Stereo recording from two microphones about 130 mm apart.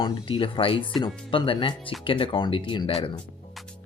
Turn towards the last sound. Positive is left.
turn(degrees=45)  # may be behind; listen again after turning